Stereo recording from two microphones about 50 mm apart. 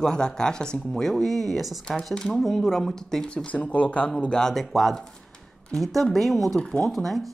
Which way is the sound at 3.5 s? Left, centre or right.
Left.